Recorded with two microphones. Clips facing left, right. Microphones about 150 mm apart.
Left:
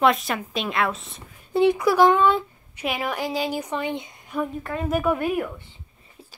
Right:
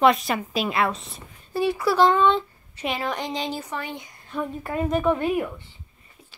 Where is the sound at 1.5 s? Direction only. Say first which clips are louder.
Left 3 dB; 20° left (ahead or behind).